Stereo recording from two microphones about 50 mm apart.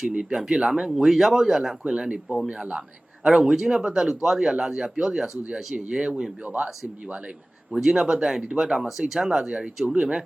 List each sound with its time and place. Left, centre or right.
0.1 s a man's voice: centre
1.8 s a man's voice: right
7.7 s a man's voice: centre